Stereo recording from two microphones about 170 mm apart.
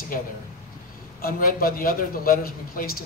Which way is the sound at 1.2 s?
55° left (ahead or behind).